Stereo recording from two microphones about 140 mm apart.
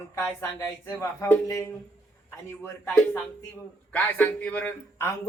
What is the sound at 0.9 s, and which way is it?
Speech, 20° left (ahead or behind).